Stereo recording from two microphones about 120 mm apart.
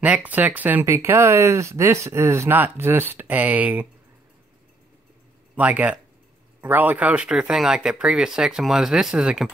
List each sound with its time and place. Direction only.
0.0 s speech: 10° right (ahead or behind)
5.6 s speech: 10° right (ahead or behind)